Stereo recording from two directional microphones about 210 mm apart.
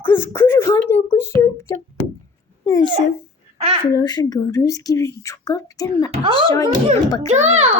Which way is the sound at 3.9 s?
20° left (ahead or behind).